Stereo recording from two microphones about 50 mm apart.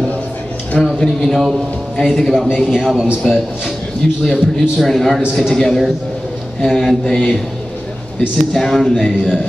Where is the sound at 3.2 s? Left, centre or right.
Centre.